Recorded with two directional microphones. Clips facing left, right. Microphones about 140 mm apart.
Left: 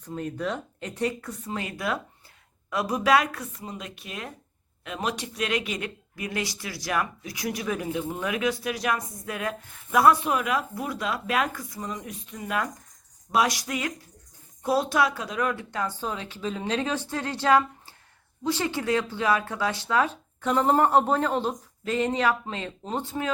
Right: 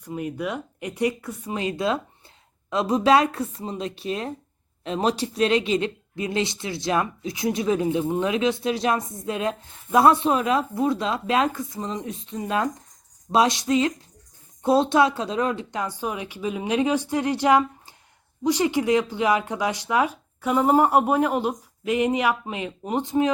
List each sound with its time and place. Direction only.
0.0 s speech: 10° right (ahead or behind)